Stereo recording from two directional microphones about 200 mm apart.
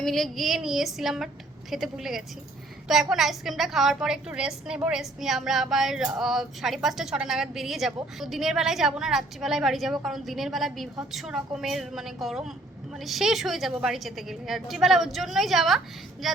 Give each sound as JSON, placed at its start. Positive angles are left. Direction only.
{"t": 0.0, "sound": "a woman's voice", "side_deg": 0}